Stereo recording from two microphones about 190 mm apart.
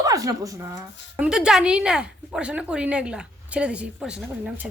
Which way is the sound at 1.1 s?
5° right (ahead or behind).